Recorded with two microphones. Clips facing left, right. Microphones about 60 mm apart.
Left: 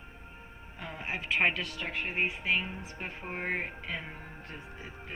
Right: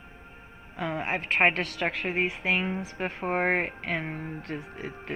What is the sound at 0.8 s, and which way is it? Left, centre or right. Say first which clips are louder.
Speech: right 8 dB; right.